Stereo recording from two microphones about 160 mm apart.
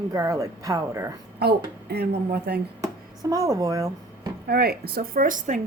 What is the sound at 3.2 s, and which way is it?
Speech, 20° right (ahead or behind).